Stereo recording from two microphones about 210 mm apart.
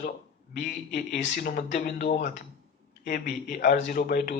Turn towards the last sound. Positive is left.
turn(degrees=40)  # may be behind; listen again after turning